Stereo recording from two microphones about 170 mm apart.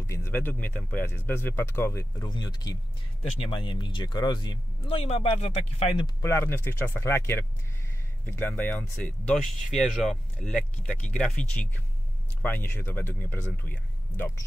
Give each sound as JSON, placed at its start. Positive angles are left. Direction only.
{"t": 0.0, "sound": "speech", "side_deg": 15}
{"t": 6.0, "sound": "speech", "side_deg": 15}